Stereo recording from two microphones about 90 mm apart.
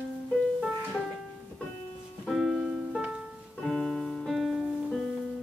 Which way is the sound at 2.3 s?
Centre (ahead or behind).